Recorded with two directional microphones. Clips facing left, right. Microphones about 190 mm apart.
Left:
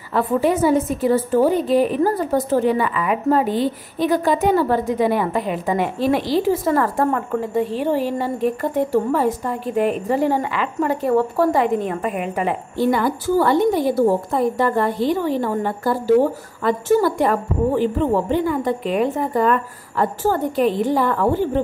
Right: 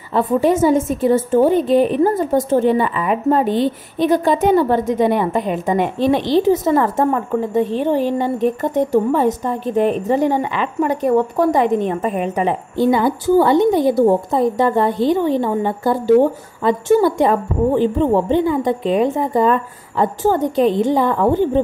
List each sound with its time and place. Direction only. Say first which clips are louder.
0.1 s a woman's voice: right 3 dB; 20° right (ahead or behind)